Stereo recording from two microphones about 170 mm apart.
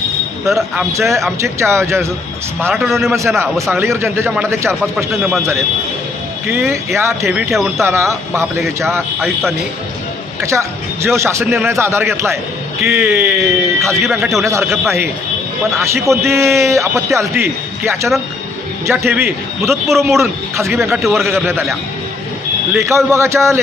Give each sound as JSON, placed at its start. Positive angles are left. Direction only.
{"t": 0.5, "sound": "a man's voice", "side_deg": -15}
{"t": 6.5, "sound": "a man's voice", "side_deg": -15}
{"t": 9.2, "sound": "speech", "side_deg": 5}
{"t": 10.4, "sound": "a man's voice", "side_deg": -15}
{"t": 13.9, "sound": "speech", "side_deg": 0}
{"t": 14.4, "sound": "a man's voice", "side_deg": -15}
{"t": 16.0, "sound": "a man's voice", "side_deg": -15}
{"t": 22.7, "sound": "a man's voice", "side_deg": -15}